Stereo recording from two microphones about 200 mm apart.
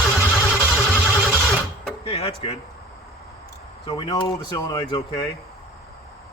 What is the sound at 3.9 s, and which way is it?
Speech, 25° left (ahead or behind).